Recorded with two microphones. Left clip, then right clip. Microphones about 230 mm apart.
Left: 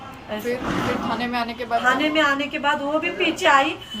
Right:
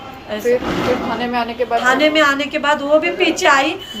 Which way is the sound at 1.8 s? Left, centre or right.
Centre.